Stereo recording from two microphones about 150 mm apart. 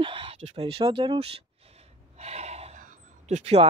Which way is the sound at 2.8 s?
50° right (ahead or behind).